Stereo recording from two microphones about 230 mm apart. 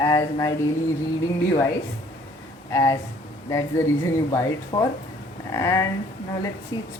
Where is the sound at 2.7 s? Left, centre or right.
Centre.